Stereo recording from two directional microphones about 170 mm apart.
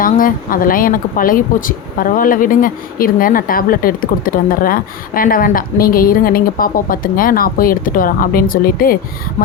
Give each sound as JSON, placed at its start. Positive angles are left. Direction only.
{"t": 0.0, "sound": "speech", "side_deg": 55}